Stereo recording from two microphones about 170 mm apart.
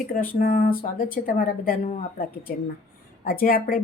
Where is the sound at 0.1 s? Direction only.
55° left (ahead or behind).